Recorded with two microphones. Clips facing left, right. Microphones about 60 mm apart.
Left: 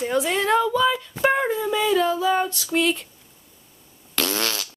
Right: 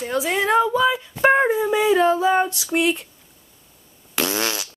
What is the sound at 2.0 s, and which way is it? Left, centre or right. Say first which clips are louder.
Female singing: right 3 dB; right.